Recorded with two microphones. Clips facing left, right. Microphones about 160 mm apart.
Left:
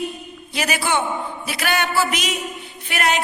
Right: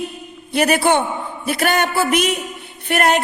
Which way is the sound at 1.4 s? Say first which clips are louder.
Right 6 dB; 50° right (ahead or behind).